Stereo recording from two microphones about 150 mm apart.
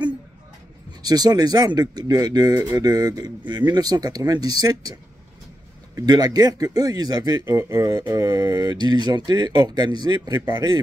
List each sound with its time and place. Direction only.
1.0 s speech: 25° right (ahead or behind)
5.9 s speech: 25° right (ahead or behind)